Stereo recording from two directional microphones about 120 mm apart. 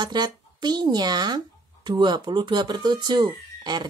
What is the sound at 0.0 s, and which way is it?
Speech, 35° right (ahead or behind).